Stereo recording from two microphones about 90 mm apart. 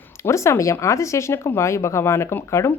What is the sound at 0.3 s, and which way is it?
Speech, 35° left (ahead or behind).